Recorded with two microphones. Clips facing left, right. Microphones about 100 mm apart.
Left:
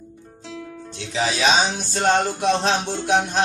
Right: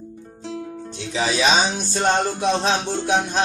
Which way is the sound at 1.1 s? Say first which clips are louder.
Even; 5° right (ahead or behind).